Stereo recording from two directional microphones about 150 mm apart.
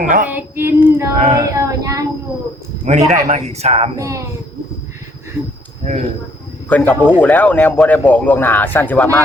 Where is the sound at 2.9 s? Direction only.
50° right (ahead or behind).